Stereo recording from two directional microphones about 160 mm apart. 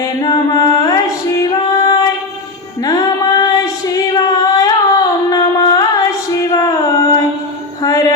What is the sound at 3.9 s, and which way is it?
Singing, 25° left (ahead or behind).